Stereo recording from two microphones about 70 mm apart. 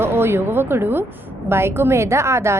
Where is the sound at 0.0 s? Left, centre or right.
Right.